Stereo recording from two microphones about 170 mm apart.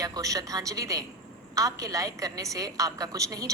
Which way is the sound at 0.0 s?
20° right (ahead or behind).